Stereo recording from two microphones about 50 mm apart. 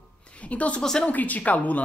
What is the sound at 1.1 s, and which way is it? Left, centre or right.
Speech, left.